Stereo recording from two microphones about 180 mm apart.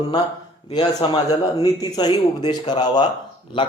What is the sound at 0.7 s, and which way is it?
Speech, 25° left (ahead or behind).